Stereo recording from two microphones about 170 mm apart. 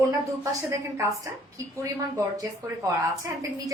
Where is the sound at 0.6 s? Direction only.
15° right (ahead or behind).